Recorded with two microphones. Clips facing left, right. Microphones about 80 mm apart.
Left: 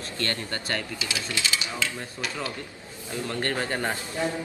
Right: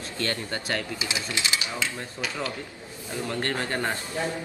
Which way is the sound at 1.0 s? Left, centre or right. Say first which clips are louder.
Right 1 dB; right.